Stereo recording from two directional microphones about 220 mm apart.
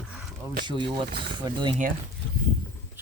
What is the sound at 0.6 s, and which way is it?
Speech, 20° right (ahead or behind).